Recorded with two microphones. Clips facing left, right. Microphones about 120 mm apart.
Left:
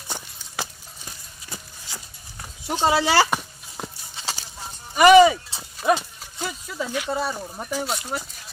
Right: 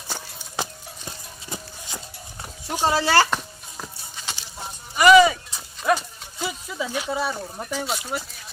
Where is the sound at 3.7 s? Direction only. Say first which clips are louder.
Left 3 dB; 30° left (ahead or behind).